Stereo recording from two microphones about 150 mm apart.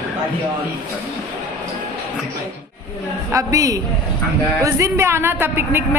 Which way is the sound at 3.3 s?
20° right (ahead or behind).